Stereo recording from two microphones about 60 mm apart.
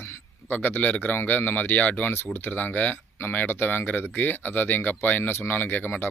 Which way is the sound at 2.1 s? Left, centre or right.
Left.